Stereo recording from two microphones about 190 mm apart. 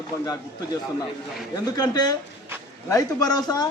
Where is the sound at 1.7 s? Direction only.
20° left (ahead or behind).